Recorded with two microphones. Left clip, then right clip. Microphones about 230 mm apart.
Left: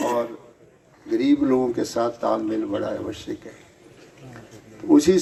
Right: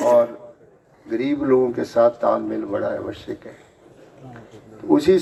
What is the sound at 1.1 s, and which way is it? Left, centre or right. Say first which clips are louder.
Speech: right 1 dB; left.